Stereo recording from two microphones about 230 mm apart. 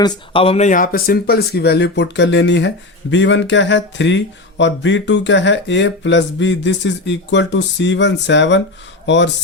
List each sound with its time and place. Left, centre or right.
0.0 s speech: left